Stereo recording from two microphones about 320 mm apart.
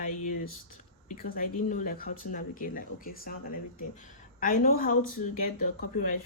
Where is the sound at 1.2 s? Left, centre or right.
Left.